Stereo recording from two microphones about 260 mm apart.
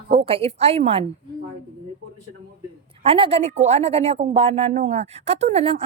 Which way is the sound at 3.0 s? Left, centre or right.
Right.